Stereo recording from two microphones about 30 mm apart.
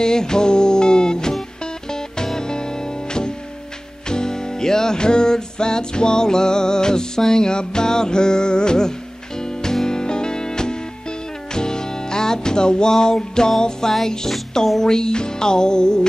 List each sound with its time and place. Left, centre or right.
0.0 s music: left